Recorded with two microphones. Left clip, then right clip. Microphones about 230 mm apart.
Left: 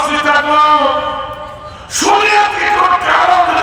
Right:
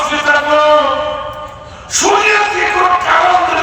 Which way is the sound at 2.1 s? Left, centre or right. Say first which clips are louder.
Left 1 dB; left.